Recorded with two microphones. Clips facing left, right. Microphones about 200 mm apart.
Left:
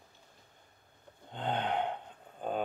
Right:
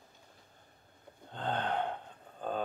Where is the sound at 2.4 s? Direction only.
15° left (ahead or behind).